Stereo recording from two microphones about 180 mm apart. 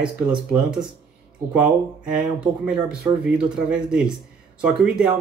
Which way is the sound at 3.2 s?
5° right (ahead or behind).